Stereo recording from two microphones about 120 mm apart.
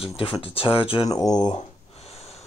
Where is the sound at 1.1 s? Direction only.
35° left (ahead or behind).